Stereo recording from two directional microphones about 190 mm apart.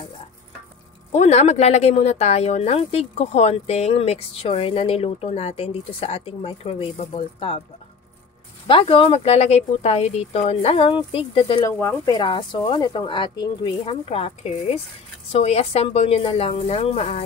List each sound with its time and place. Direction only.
1.1 s speech: 35° left (ahead or behind)
8.6 s speech: 30° left (ahead or behind)
11.6 s speech: 15° left (ahead or behind); by 17.2 s 35° left (ahead or behind)